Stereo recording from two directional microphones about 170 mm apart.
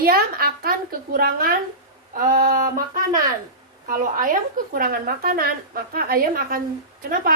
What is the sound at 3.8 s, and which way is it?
A woman's voice, 55° right (ahead or behind).